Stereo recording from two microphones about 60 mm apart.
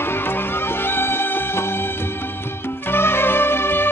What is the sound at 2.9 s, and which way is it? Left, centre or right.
Music, left.